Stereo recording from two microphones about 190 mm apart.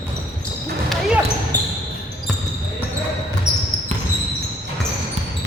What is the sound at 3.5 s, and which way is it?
Basketball bounce, 5° right (ahead or behind).